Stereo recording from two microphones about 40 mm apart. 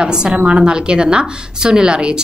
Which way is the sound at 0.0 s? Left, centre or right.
Centre.